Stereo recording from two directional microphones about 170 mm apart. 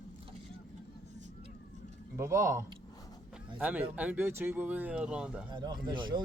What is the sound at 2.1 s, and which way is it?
A man's voice, 15° right (ahead or behind).